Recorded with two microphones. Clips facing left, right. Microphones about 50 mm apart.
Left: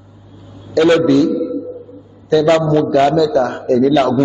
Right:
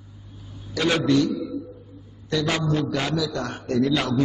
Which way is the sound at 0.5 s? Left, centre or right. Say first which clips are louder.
Left 12 dB; centre.